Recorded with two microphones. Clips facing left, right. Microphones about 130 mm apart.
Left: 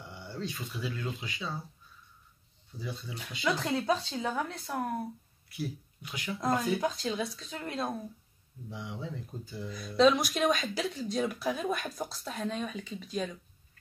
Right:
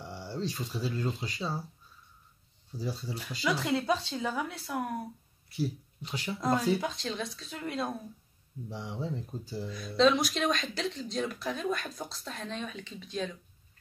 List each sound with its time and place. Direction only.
0.0 s speech: 35° right (ahead or behind)
2.8 s speech: 35° right (ahead or behind)
3.4 s speech: centre (ahead or behind)
5.6 s speech: 30° right (ahead or behind)
6.4 s speech: centre (ahead or behind)
8.6 s speech: 35° right (ahead or behind)
9.7 s speech: centre (ahead or behind)